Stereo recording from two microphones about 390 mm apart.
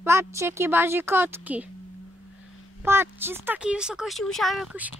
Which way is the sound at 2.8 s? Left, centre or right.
Centre.